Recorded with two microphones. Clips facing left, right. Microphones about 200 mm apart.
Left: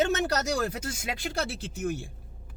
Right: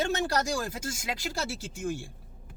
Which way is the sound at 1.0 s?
25° left (ahead or behind).